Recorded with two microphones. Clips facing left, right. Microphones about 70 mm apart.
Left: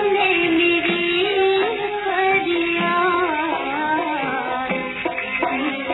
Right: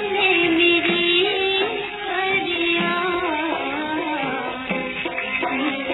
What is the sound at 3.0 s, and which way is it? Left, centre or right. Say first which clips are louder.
Music: left 4 dB; left.